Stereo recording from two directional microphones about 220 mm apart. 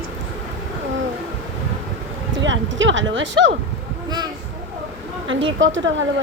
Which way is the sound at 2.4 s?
60° right (ahead or behind).